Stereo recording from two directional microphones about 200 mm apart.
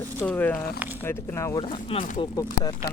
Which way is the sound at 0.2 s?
10° left (ahead or behind).